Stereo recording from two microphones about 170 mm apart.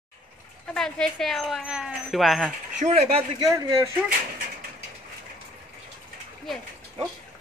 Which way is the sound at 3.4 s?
15° right (ahead or behind).